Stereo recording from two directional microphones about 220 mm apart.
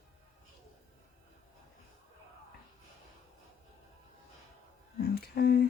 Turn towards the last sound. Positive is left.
turn(degrees=45)  # may be behind; listen again after turning